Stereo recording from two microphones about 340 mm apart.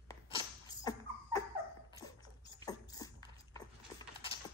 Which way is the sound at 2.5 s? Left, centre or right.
Centre.